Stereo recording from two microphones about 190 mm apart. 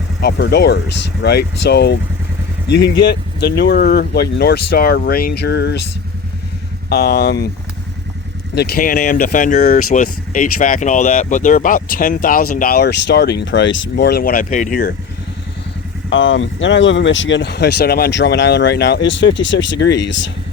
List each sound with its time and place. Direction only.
0.2 s speech: 60° left (ahead or behind)
6.9 s speech: 55° left (ahead or behind)
8.5 s speech: 55° left (ahead or behind)
16.0 s speech: 75° left (ahead or behind)